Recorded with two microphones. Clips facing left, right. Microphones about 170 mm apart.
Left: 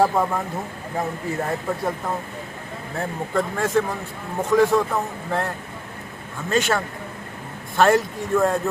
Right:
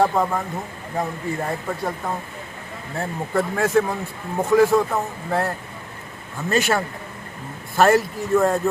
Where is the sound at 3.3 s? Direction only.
10° right (ahead or behind).